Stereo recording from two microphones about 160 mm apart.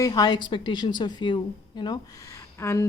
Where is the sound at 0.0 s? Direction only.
25° left (ahead or behind).